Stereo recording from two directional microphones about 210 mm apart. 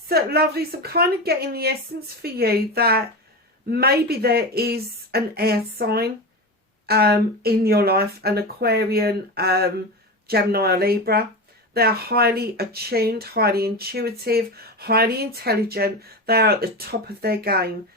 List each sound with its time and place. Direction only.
0.1 s speech: 50° right (ahead or behind)